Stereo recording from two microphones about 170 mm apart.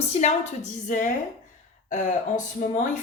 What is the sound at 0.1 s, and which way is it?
Speech, 45° left (ahead or behind).